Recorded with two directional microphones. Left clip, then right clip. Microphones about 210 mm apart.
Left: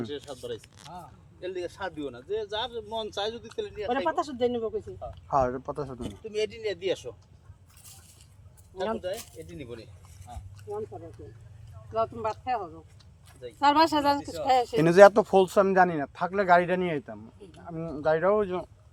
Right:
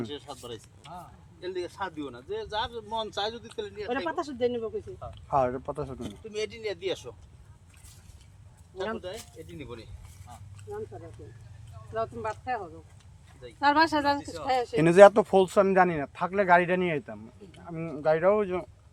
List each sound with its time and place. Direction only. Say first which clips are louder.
0.1 s speech: left 3 dB; 15° right (ahead or behind)
3.8 s speech: left 4 dB; 50° left (ahead or behind)
4.9 s speech: even; 5° left (ahead or behind)
9.5 s speech: left 1 dB; centre (ahead or behind)
10.9 s speech: left 2 dB; 20° left (ahead or behind)
11.9 s speech: left 3 dB; 30° left (ahead or behind)
14.8 s speech: right 1 dB; 5° left (ahead or behind)